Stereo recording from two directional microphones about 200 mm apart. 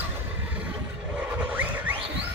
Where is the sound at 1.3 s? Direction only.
10° right (ahead or behind).